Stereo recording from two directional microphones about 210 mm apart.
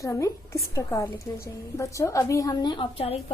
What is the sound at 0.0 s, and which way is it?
A woman's voice, 15° left (ahead or behind).